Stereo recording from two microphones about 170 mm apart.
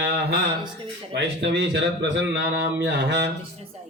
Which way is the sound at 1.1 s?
90° right.